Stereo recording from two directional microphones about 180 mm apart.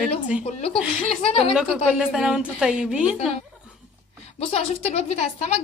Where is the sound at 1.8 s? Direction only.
5° right (ahead or behind).